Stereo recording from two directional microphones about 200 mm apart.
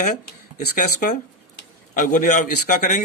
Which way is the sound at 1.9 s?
40° left (ahead or behind).